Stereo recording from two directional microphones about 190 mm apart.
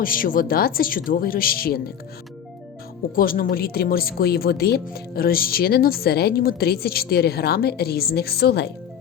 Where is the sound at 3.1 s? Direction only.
50° left (ahead or behind).